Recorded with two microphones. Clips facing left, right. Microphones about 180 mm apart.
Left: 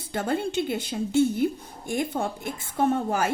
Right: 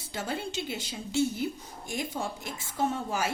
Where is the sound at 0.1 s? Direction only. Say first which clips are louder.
Left 8 dB; 55° left (ahead or behind).